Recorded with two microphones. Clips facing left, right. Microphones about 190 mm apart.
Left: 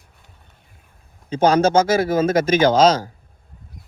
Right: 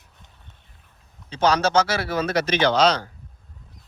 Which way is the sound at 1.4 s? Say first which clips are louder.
Left 4 dB; 50° left (ahead or behind).